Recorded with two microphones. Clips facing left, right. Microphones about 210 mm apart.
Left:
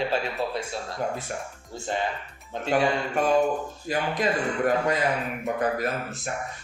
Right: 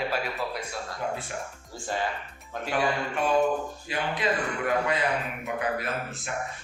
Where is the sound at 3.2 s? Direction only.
40° left (ahead or behind).